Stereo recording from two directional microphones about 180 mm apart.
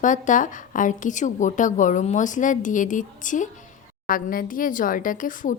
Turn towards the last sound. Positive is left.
turn(degrees=45)  # may be behind; listen again after turning